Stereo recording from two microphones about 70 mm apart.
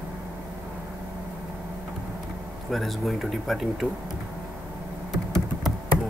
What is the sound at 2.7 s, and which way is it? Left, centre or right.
Speech, centre.